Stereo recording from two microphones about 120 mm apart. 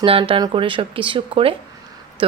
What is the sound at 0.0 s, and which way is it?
Speech, 50° right (ahead or behind).